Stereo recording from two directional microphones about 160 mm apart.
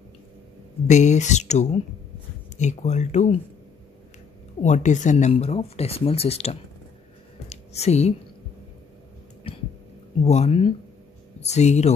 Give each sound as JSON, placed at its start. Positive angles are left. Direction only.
{"t": 0.8, "sound": "speech", "side_deg": 45}
{"t": 4.6, "sound": "speech", "side_deg": 50}
{"t": 7.4, "sound": "a sound", "side_deg": 40}
{"t": 10.2, "sound": "speech", "side_deg": 40}